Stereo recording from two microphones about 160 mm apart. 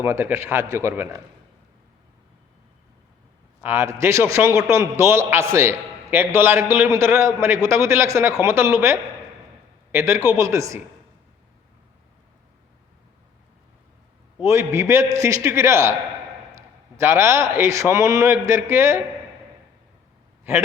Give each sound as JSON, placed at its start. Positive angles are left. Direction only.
{"t": 0.0, "sound": "a man's voice", "side_deg": -15}
{"t": 3.6, "sound": "a man's voice", "side_deg": -15}
{"t": 14.4, "sound": "a man's voice", "side_deg": -15}
{"t": 17.0, "sound": "a man's voice", "side_deg": -15}